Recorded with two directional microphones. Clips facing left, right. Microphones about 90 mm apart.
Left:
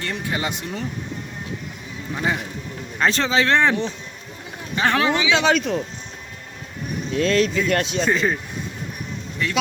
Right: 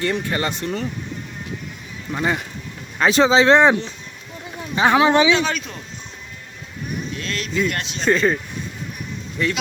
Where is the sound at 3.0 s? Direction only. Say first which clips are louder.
Right 5 dB; 10° right (ahead or behind).